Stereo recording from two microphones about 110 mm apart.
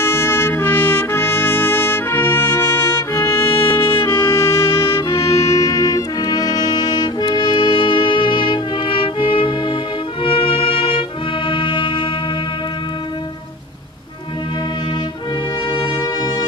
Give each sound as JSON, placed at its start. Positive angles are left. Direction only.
{"t": 0.0, "sound": "trumpet", "side_deg": 20}
{"t": 10.2, "sound": "music", "side_deg": 55}
{"t": 15.7, "sound": "brass instrument", "side_deg": 45}